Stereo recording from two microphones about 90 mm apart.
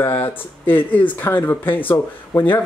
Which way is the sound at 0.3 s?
20° left (ahead or behind).